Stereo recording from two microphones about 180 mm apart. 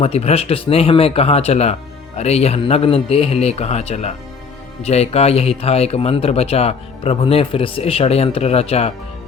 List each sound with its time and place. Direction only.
0.0 s speech: 35° left (ahead or behind)